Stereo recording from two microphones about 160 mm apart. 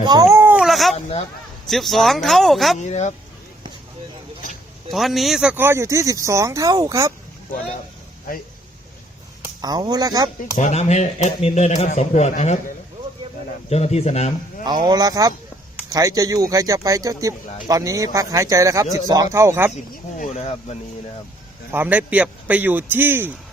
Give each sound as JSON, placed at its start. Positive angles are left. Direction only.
{"t": 0.0, "sound": "a sound", "side_deg": -25}
{"t": 0.6, "sound": "baby cry", "side_deg": 0}
{"t": 1.7, "sound": "speech", "side_deg": 0}
{"t": 2.7, "sound": "a man's voice", "side_deg": 45}
{"t": 4.9, "sound": "speech", "side_deg": 0}
{"t": 9.6, "sound": "speech", "side_deg": -25}
{"t": 10.6, "sound": "a man's voice", "side_deg": 45}
{"t": 14.6, "sound": "a man's voice", "side_deg": -25}
{"t": 19.7, "sound": "a man's voice", "side_deg": 50}
{"t": 21.7, "sound": "a man's voice", "side_deg": -10}